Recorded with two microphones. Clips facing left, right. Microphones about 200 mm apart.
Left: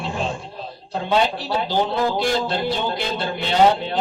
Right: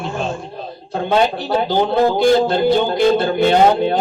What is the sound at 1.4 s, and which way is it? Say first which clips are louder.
Speech: right 5 dB; 50° right (ahead or behind).